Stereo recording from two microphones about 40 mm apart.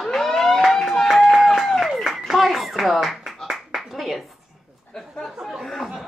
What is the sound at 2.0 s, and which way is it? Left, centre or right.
Speech, centre.